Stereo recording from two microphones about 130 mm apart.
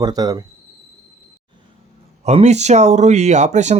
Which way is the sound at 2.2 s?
55° right (ahead or behind).